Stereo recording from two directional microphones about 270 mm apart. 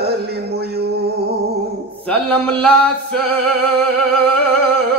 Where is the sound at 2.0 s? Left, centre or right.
Centre.